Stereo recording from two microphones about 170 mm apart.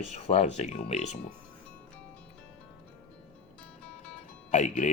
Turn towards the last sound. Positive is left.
turn(degrees=45)  # may be behind; listen again after turning